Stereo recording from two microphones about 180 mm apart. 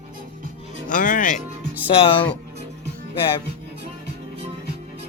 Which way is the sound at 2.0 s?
30° left (ahead or behind).